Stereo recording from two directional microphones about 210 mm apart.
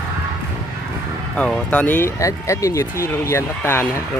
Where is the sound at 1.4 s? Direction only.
5° left (ahead or behind).